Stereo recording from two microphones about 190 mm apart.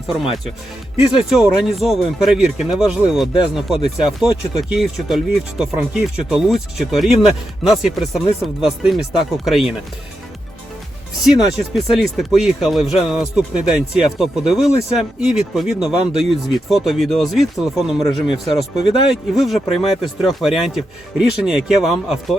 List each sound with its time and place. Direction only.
1.3 s speech: centre (ahead or behind)
11.5 s speech: centre (ahead or behind)